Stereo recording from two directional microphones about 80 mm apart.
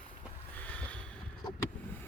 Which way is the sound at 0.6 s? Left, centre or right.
Centre.